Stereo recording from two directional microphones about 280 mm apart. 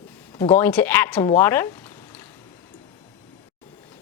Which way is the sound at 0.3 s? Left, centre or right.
Centre.